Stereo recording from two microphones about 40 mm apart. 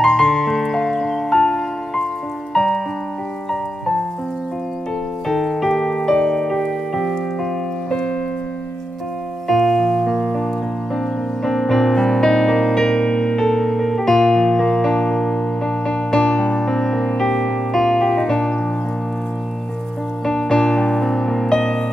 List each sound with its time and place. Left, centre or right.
0.0 s music: centre
5.3 s music: centre
9.5 s music: centre
11.4 s music: centre
20.2 s music: centre